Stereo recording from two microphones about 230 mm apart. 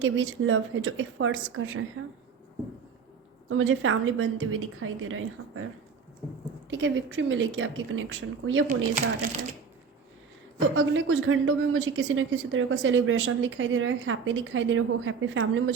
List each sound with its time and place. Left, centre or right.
0.0 s speech: right
3.5 s speech: right
6.7 s speech: right
10.8 s speech: right